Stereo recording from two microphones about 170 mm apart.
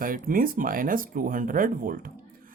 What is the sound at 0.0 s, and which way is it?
Speech, 55° right (ahead or behind).